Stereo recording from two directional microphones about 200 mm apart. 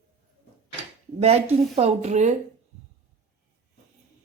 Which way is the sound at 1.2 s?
30° right (ahead or behind).